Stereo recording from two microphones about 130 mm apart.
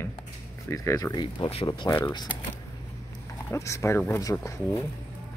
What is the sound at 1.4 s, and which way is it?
Speech, 45° left (ahead or behind).